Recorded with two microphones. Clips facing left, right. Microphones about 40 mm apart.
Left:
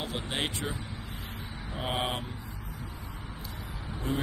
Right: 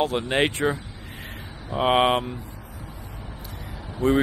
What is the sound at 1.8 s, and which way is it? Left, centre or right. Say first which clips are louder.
Speech: right 13 dB; right.